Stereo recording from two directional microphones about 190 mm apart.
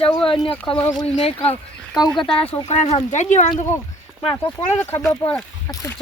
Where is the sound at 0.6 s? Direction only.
5° left (ahead or behind).